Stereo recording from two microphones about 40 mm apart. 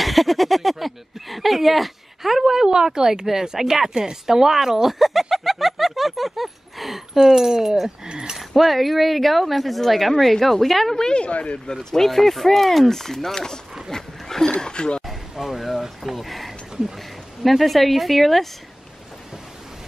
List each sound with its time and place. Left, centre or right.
0.0 s speech: centre
5.3 s a sound: centre
7.2 s speech: centre
8.4 s speech: centre
11.0 s speech: left
11.7 s speech: centre
13.8 s roaring cats: centre
14.6 s a sound: left
15.3 s speech: centre